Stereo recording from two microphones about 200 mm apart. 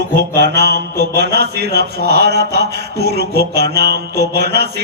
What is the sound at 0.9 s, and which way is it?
Music, 55° right (ahead or behind).